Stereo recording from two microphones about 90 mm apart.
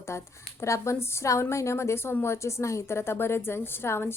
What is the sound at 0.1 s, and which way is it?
A woman's voice, 30° left (ahead or behind).